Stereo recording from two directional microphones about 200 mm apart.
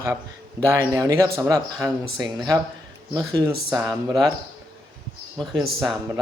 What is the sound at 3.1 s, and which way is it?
Speech, 20° right (ahead or behind).